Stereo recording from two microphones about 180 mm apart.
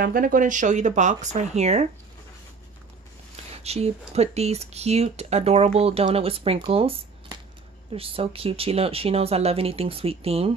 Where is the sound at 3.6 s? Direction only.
35° right (ahead or behind).